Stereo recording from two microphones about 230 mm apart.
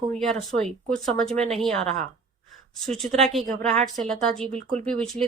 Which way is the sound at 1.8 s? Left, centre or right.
Right.